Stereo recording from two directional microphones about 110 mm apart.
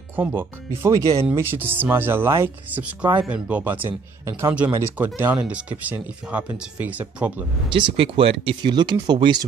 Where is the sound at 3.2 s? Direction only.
10° right (ahead or behind).